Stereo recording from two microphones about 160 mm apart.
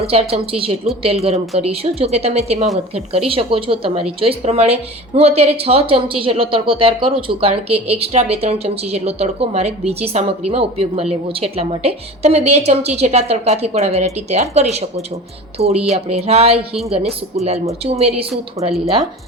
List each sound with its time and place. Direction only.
0.0 s a woman's voice: 40° right (ahead or behind)
18.6 s speech: 20° right (ahead or behind)